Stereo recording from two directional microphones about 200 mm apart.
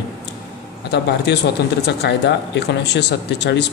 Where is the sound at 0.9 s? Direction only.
55° left (ahead or behind).